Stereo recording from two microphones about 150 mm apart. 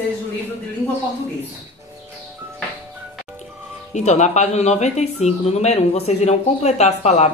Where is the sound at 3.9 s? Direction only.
50° left (ahead or behind).